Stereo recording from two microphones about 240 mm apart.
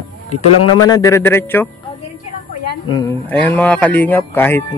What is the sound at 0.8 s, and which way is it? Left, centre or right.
Speech, centre.